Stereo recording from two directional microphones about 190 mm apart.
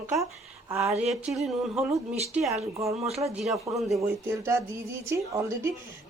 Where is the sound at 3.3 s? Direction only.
Centre (ahead or behind).